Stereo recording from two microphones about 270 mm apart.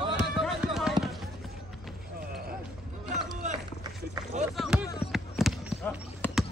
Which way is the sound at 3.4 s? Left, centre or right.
Right.